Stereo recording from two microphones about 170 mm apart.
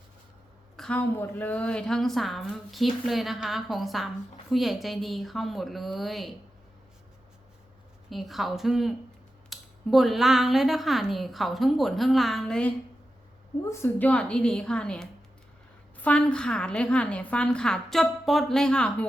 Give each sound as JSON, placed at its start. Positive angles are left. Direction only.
{"t": 0.8, "sound": "a woman's voice", "side_deg": 5}
{"t": 8.1, "sound": "a woman's voice", "side_deg": 0}
{"t": 13.7, "sound": "a woman's voice", "side_deg": 15}